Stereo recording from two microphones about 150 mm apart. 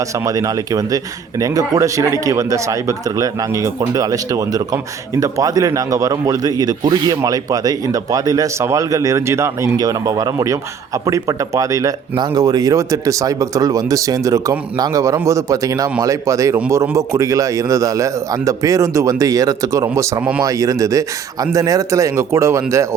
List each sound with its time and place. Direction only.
0.3 s speech: 25° right (ahead or behind)